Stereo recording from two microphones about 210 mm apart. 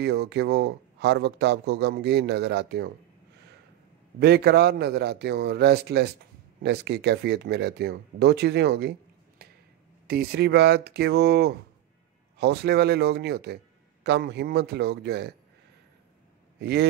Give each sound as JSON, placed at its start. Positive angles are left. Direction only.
{"t": 0.0, "sound": "speech", "side_deg": -50}
{"t": 4.2, "sound": "speech", "side_deg": -50}
{"t": 9.4, "sound": "a sound", "side_deg": -45}
{"t": 10.0, "sound": "speech", "side_deg": -50}
{"t": 16.5, "sound": "speech", "side_deg": -50}